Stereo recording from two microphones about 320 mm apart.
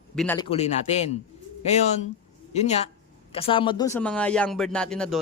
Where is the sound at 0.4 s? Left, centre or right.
Centre.